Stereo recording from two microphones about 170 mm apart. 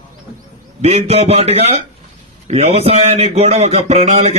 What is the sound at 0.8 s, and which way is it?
Mantra, 40° right (ahead or behind).